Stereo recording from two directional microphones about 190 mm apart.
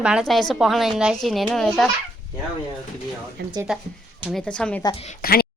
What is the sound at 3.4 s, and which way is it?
Speech, 55° right (ahead or behind).